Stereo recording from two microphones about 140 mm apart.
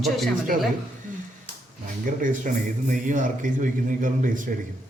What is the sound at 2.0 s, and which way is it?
A man's voice, 70° right (ahead or behind).